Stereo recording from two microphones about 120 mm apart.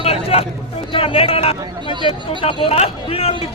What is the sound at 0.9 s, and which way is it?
Speech, 50° left (ahead or behind).